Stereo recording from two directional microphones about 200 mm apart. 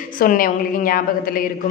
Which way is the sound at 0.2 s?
45° left (ahead or behind).